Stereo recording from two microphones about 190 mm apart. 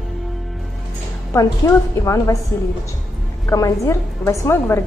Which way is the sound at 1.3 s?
15° left (ahead or behind).